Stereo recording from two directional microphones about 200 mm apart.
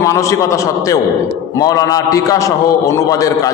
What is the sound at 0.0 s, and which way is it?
A man's voice, 15° left (ahead or behind).